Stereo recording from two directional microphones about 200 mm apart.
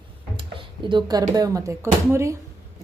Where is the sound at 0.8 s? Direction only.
20° right (ahead or behind).